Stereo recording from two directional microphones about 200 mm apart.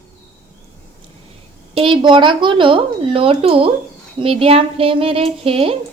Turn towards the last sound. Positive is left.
turn(degrees=-30)  # may be behind; listen again after turning